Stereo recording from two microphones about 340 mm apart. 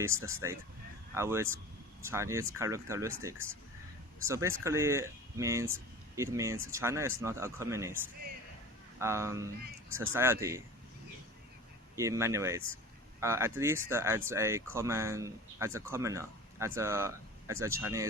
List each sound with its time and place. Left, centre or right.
0.0 s speech: centre
9.0 s speech: centre
11.9 s speech: centre